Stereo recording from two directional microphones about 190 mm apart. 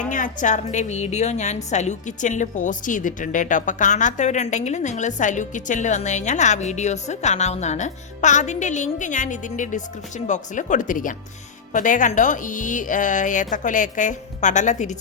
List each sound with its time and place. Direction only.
0.1 s a woman's voice: 40° left (ahead or behind)